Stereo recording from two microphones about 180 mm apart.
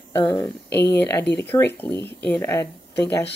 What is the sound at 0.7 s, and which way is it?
Speech, 70° left (ahead or behind).